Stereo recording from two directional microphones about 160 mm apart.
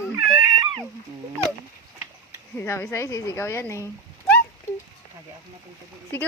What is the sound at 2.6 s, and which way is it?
Speech, 15° left (ahead or behind).